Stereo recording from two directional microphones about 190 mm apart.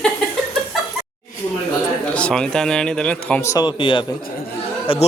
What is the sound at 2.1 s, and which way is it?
A man's voice, 5° left (ahead or behind).